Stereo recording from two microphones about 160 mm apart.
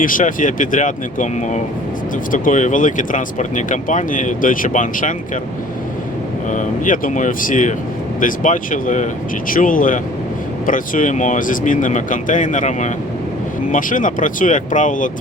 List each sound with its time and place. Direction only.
0.0 s speech: 55° left (ahead or behind)
6.5 s speech: 55° left (ahead or behind)